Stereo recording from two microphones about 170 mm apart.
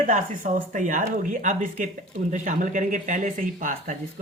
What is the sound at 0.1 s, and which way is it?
Speech, 50° right (ahead or behind).